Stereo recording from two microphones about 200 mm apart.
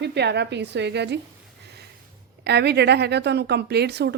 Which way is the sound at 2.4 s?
55° right (ahead or behind).